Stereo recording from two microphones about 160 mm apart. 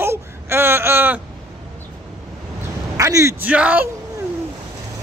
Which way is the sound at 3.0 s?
20° right (ahead or behind).